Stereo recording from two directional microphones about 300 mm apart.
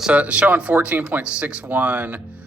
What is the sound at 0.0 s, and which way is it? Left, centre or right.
Speech, centre.